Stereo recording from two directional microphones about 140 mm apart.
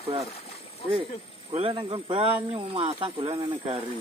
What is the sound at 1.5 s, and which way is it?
Speech, 45° right (ahead or behind).